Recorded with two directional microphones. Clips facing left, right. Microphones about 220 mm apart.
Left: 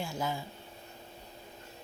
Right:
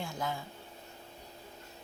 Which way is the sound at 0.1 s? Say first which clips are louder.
Left 2 dB; centre (ahead or behind).